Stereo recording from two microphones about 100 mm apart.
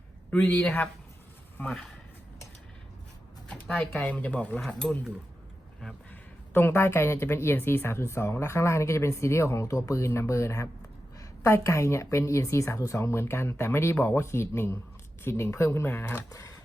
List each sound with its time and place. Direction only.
0.3 s speech: 15° left (ahead or behind)
3.5 s speech: 15° left (ahead or behind)
6.5 s a woman's voice: 20° left (ahead or behind)